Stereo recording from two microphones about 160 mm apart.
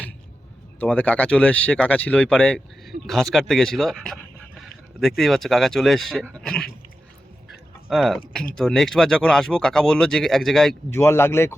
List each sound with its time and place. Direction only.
0.8 s speech: 10° left (ahead or behind)
7.9 s speech: centre (ahead or behind)
10.9 s speech: 15° left (ahead or behind)